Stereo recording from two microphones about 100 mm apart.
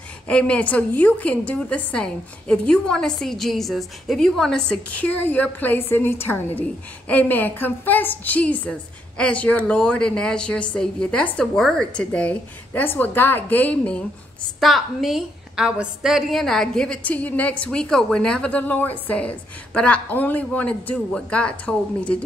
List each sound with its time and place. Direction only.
0.3 s a woman's voice: 10° left (ahead or behind)
14.6 s a woman's voice: centre (ahead or behind)